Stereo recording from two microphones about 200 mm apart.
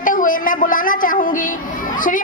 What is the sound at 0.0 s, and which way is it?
A woman's voice, 40° left (ahead or behind).